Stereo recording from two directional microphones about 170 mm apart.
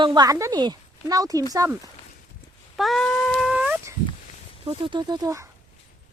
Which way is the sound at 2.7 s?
Centre (ahead or behind).